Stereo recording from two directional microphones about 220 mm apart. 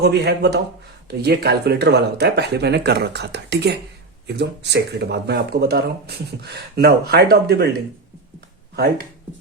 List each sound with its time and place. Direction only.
0.0 s speech: 50° right (ahead or behind)